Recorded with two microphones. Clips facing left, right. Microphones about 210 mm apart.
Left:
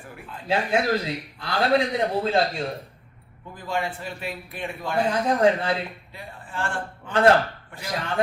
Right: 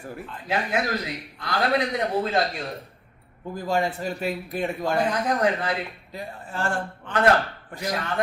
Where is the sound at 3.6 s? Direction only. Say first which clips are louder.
Right 4 dB; 40° right (ahead or behind).